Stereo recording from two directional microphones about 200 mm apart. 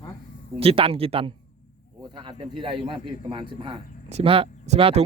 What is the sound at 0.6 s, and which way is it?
Speech, 30° right (ahead or behind).